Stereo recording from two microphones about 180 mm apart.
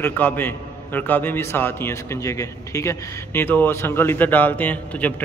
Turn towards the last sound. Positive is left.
turn(degrees=10)  # may be behind; listen again after turning